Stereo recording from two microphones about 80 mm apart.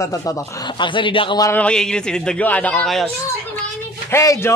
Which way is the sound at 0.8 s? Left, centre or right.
Left.